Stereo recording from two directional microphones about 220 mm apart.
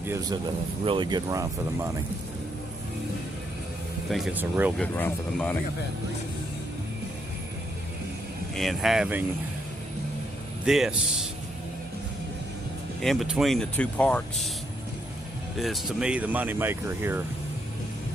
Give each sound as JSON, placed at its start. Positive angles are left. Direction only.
{"t": 0.9, "sound": "speech", "side_deg": -20}
{"t": 4.1, "sound": "speech", "side_deg": -5}
{"t": 4.8, "sound": "speech", "side_deg": 5}
{"t": 8.5, "sound": "speech", "side_deg": 0}
{"t": 10.7, "sound": "speech", "side_deg": 0}
{"t": 13.0, "sound": "speech", "side_deg": 0}
{"t": 15.5, "sound": "speech", "side_deg": 0}